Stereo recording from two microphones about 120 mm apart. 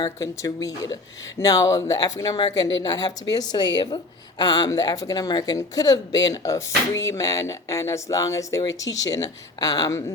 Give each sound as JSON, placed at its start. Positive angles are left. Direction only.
{"t": 0.0, "sound": "a woman's voice", "side_deg": 30}